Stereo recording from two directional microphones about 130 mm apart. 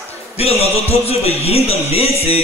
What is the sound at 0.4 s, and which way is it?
A man's voice, 50° left (ahead or behind).